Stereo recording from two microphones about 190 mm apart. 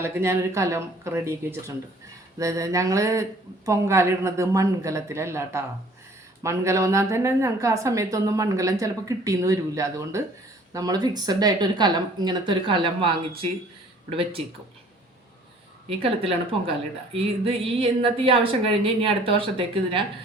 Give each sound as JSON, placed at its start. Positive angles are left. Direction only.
{"t": 0.0, "sound": "a woman's voice", "side_deg": -15}
{"t": 15.9, "sound": "a woman's voice", "side_deg": -30}